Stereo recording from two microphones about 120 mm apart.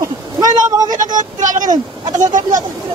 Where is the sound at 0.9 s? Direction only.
90° right.